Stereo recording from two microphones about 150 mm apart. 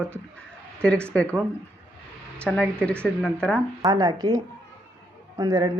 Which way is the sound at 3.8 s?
25° right (ahead or behind).